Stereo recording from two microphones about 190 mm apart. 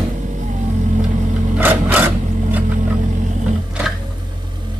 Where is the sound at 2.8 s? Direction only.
40° right (ahead or behind).